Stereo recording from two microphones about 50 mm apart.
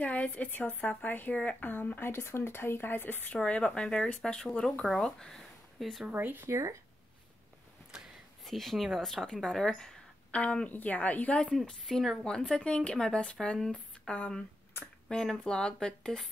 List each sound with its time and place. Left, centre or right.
0.0 s speech: left
1.7 s speech: left
3.4 s a woman's voice: left; by 6.0 s centre
6.1 s speech: right
6.4 s speech: right
8.5 s a woman's voice: centre
10.3 s speech: left
12.0 s a woman's voice: centre